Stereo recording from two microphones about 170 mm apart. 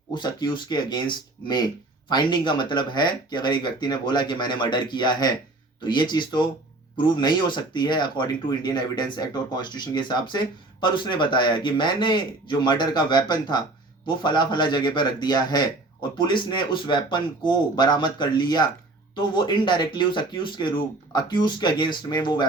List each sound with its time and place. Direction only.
0.1 s speech: 25° left (ahead or behind)